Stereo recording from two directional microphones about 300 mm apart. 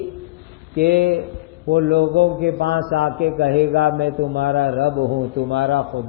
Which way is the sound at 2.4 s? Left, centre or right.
Right.